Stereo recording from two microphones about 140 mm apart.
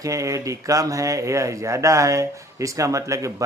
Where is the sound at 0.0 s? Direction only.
25° right (ahead or behind).